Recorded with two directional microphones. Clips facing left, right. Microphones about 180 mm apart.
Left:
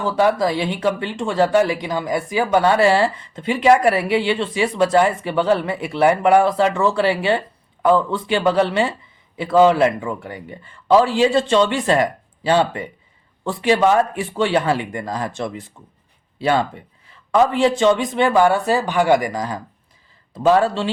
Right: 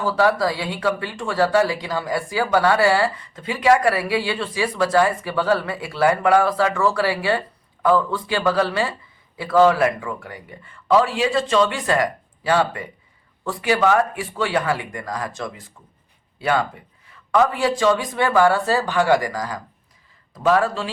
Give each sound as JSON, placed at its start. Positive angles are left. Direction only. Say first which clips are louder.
{"t": 0.0, "sound": "speech", "louder": "left 2 dB", "side_deg": 20}